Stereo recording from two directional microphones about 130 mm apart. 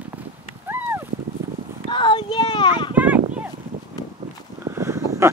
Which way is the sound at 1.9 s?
40° left (ahead or behind).